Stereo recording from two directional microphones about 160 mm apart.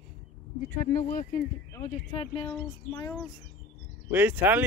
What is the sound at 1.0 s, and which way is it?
Speech, 60° left (ahead or behind).